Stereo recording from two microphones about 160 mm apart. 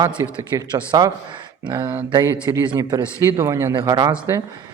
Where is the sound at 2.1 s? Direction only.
15° right (ahead or behind).